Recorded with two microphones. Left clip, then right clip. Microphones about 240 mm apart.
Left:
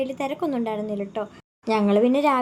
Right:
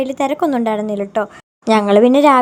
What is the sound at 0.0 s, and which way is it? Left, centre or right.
A woman's voice, right.